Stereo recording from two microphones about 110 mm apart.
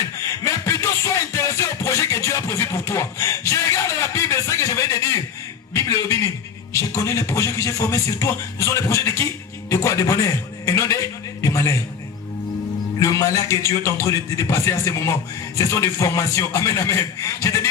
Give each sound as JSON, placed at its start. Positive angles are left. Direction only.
{"t": 0.4, "sound": "music", "side_deg": 30}
{"t": 5.7, "sound": "chuckle", "side_deg": 25}
{"t": 6.7, "sound": "a man's voice", "side_deg": 30}
{"t": 11.4, "sound": "a sound", "side_deg": 25}
{"t": 13.0, "sound": "a man's voice", "side_deg": 30}